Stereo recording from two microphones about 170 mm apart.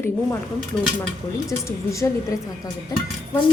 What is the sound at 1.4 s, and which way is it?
A woman's voice, 20° left (ahead or behind).